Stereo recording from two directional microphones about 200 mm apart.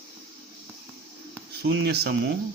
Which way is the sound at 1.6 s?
55° right (ahead or behind).